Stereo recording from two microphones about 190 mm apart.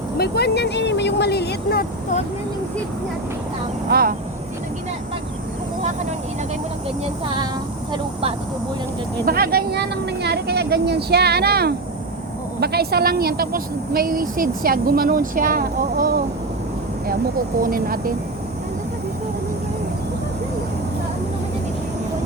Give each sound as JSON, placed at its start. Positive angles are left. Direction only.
{"t": 0.2, "sound": "speech", "side_deg": 60}
{"t": 3.8, "sound": "speech", "side_deg": -55}
{"t": 9.2, "sound": "a woman's voice", "side_deg": -50}
{"t": 17.6, "sound": "a woman's voice", "side_deg": -50}